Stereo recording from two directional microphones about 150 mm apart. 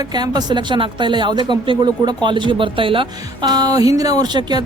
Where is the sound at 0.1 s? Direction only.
25° right (ahead or behind).